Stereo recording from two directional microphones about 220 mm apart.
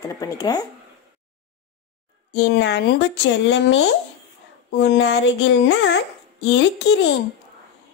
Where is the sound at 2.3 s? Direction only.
55° left (ahead or behind).